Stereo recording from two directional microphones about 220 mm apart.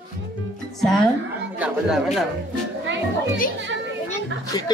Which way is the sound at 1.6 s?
Centre (ahead or behind).